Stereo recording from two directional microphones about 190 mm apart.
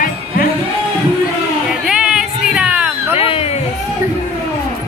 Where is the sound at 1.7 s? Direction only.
5° right (ahead or behind).